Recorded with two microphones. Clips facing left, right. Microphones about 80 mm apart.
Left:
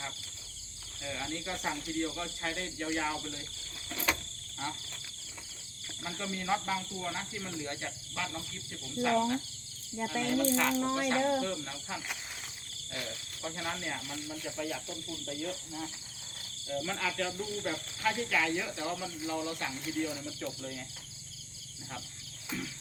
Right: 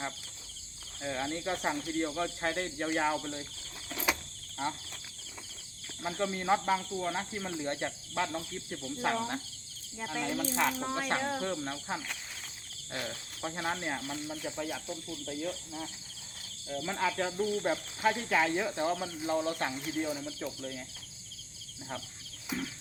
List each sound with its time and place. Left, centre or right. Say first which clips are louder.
1.0 s speech: right 4 dB; right
3.8 s cricket: right 1 dB; centre
4.5 s speech: right 4 dB; centre
6.0 s speech: right 5 dB; right
10.1 s speech: left 4 dB; centre
11.1 s speech: left 2 dB; right; by 15.9 s centre
16.8 s speech: right 4 dB; right
19.8 s speech: right 1 dB; centre
22.5 s music: right 3 dB; right